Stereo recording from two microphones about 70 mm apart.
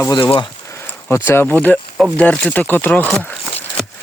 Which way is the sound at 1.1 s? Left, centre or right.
Left.